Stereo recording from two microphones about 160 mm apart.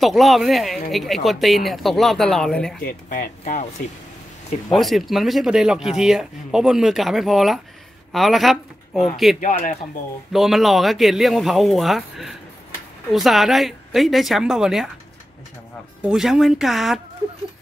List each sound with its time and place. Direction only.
0.0 s speech: centre (ahead or behind)
2.8 s speech: 60° left (ahead or behind)
4.7 s speech: centre (ahead or behind)
9.4 s speech: 55° left (ahead or behind)
10.3 s speech: centre (ahead or behind)
16.1 s speech: centre (ahead or behind)